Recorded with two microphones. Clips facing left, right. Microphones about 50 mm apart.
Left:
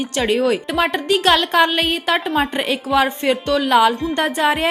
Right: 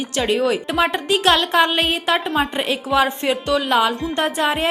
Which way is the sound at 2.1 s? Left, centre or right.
Centre.